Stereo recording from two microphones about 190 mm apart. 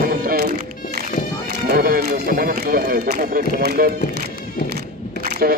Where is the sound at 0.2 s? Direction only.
50° right (ahead or behind).